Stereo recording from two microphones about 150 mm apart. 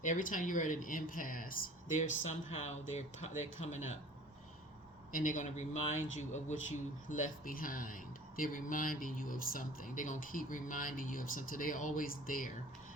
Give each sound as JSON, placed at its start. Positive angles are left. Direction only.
{"t": 0.0, "sound": "speech", "side_deg": 60}
{"t": 5.1, "sound": "speech", "side_deg": 60}